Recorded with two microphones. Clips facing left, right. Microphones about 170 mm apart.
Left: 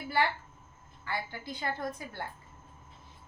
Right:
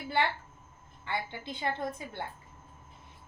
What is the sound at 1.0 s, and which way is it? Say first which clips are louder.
Child singing: right 1 dB; 25° right (ahead or behind).